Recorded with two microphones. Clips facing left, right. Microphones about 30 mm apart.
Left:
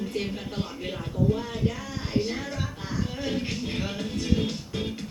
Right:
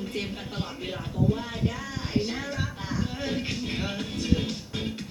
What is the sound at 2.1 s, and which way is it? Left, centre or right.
Music, centre.